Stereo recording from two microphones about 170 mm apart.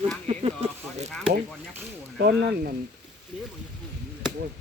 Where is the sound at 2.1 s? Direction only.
70° right (ahead or behind).